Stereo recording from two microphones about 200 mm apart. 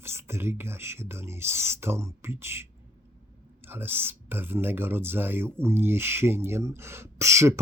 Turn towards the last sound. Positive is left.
turn(degrees=-15)  # may be behind; listen again after turning